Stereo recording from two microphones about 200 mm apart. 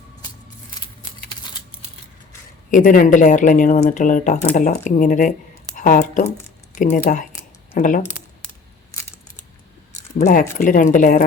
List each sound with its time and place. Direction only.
2.6 s speech: 45° left (ahead or behind)
8.9 s scissors: 20° left (ahead or behind)
10.2 s speech: 40° left (ahead or behind)